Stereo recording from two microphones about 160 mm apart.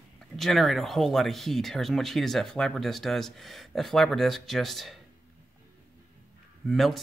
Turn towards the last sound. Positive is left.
turn(degrees=0)  # may be behind; listen again after turning